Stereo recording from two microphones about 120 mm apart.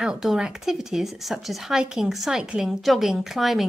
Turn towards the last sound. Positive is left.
turn(degrees=0)  # may be behind; listen again after turning